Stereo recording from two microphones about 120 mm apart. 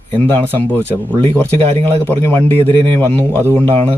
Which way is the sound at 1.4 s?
15° left (ahead or behind).